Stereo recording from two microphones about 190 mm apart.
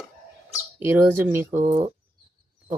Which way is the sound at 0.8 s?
10° right (ahead or behind).